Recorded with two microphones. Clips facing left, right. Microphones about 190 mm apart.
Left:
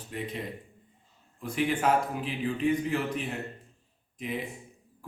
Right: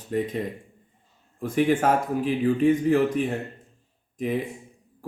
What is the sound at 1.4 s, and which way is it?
Speech, 50° right (ahead or behind).